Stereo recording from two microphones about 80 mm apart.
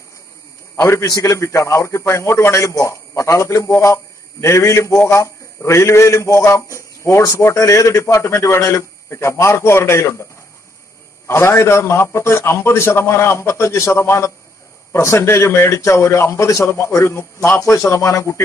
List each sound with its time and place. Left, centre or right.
0.7 s a man's voice: left
11.2 s a man's voice: left